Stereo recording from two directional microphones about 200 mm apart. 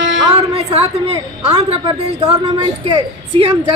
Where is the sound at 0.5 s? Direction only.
30° right (ahead or behind).